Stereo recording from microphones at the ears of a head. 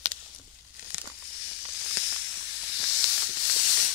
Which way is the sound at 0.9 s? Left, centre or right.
Left.